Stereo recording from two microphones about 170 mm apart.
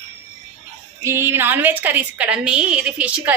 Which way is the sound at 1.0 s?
15° right (ahead or behind).